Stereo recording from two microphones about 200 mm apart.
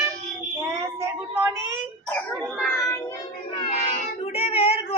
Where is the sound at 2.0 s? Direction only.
5° left (ahead or behind).